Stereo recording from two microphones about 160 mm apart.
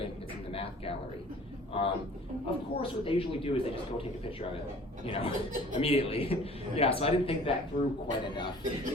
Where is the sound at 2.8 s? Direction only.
35° left (ahead or behind).